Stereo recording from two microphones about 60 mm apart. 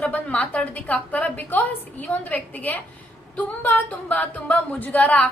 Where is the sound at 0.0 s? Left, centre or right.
Left.